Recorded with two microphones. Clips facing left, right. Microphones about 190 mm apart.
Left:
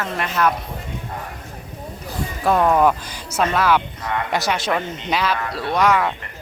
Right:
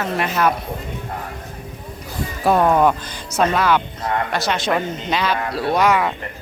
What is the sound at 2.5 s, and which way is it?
A woman's voice, centre (ahead or behind).